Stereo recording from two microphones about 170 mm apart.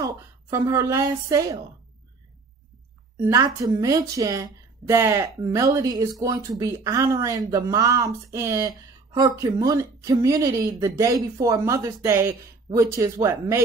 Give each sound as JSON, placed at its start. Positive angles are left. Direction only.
{"t": 0.0, "sound": "a woman's voice", "side_deg": -20}
{"t": 3.2, "sound": "speech", "side_deg": -20}